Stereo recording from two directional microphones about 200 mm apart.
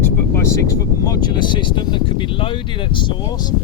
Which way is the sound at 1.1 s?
20° left (ahead or behind).